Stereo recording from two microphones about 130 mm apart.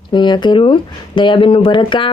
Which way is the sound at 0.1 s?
35° left (ahead or behind).